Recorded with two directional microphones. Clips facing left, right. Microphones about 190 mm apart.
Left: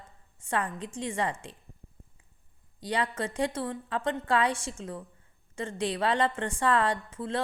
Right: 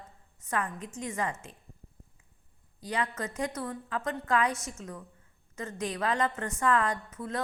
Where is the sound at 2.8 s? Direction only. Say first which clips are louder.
Left 3 dB; 30° left (ahead or behind).